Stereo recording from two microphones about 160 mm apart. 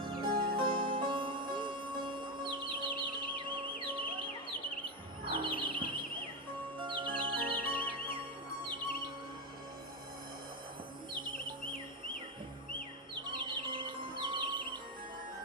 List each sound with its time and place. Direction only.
0.0 s music: 30° right (ahead or behind)
5.7 s bird: 30° right (ahead or behind)
6.7 s music: 30° right (ahead or behind)
11.1 s chirp: 30° right (ahead or behind)
12.7 s music: 30° right (ahead or behind)